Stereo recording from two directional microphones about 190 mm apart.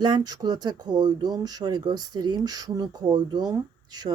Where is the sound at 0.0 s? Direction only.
20° right (ahead or behind).